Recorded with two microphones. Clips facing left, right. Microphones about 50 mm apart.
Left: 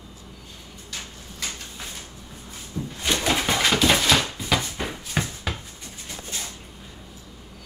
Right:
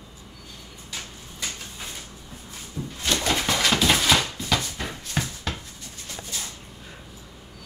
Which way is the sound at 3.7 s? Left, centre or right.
Centre.